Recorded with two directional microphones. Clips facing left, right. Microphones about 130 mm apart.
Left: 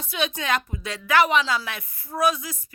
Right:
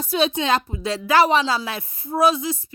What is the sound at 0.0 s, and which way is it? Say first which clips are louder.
A woman's voice: right 7 dB; 35° right (ahead or behind).